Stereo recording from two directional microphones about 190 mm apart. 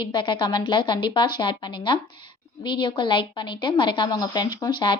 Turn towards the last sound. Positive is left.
turn(degrees=25)  # may be behind; listen again after turning